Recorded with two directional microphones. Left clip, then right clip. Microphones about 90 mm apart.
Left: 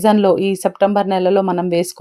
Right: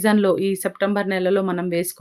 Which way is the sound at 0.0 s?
35° left (ahead or behind).